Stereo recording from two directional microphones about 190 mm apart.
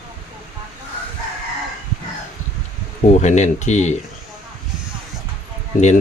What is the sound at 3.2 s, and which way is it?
Speech, 40° left (ahead or behind).